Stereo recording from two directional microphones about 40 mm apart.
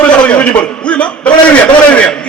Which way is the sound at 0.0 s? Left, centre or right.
Left.